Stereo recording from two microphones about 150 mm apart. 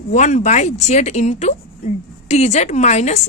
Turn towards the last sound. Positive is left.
turn(degrees=50)  # may be behind; listen again after turning